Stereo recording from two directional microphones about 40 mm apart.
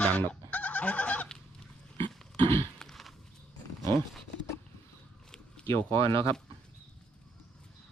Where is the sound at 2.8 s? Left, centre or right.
Centre.